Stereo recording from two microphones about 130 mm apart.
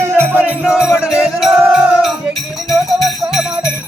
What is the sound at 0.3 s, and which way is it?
Music, 15° right (ahead or behind).